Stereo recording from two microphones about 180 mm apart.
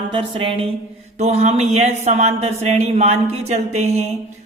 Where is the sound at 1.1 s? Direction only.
40° right (ahead or behind).